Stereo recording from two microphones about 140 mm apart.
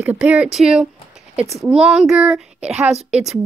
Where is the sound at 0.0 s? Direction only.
10° right (ahead or behind).